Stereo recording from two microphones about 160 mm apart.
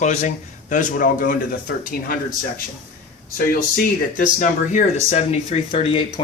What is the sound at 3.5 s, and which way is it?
Speech, 60° left (ahead or behind).